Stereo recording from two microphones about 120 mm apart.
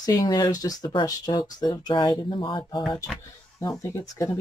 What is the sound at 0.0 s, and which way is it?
Speech, 30° left (ahead or behind).